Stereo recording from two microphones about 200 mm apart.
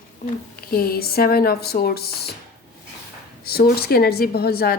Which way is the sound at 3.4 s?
50° left (ahead or behind).